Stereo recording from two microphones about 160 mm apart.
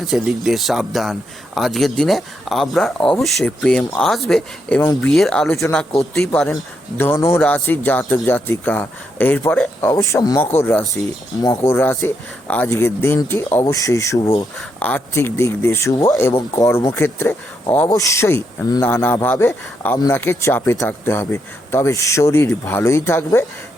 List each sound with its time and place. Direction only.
0.0 s speech: centre (ahead or behind)
7.0 s speech: 15° left (ahead or behind)